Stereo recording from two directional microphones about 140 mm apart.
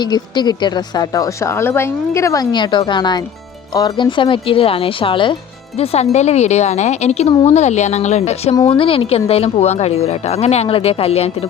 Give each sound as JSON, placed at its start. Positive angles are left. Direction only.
{"t": 0.0, "sound": "a woman's voice", "side_deg": 30}
{"t": 8.6, "sound": "speech", "side_deg": 40}